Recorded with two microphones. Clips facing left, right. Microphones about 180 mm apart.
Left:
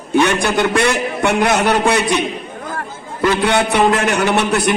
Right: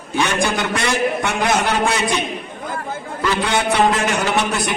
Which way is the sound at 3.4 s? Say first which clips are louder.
Left 2 dB; 65° left (ahead or behind).